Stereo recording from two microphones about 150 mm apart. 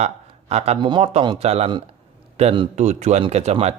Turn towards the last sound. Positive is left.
turn(degrees=-45)  # may be behind; listen again after turning